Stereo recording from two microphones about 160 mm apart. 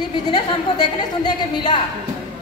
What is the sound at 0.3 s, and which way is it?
A woman's voice, 25° left (ahead or behind).